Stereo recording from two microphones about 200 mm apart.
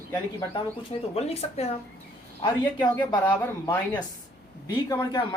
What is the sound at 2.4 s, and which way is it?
Speech, 20° left (ahead or behind).